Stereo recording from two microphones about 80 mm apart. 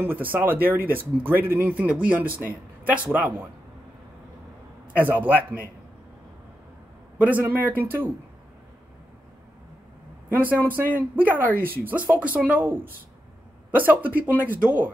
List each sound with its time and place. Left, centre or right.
0.0 s speech: right
4.9 s speech: right
7.2 s speech: centre
10.3 s speech: right